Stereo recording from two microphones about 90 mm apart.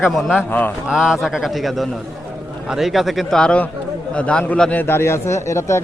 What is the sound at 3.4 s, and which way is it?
A man's voice, 15° left (ahead or behind).